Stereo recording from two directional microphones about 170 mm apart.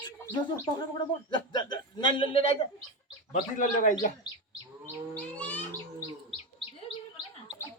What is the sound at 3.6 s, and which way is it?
Speech, 50° left (ahead or behind).